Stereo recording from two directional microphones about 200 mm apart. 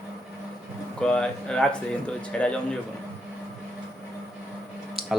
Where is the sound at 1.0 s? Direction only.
5° left (ahead or behind).